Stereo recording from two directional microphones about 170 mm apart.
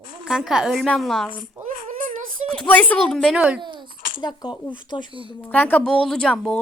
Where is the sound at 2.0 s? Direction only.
50° right (ahead or behind).